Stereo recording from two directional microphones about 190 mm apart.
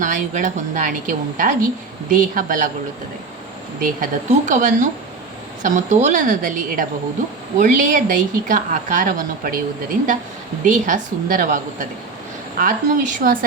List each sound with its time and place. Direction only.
0.0 s a woman's voice: 40° right (ahead or behind)
3.8 s a woman's voice: 45° right (ahead or behind)
10.7 s a woman's voice: 45° right (ahead or behind)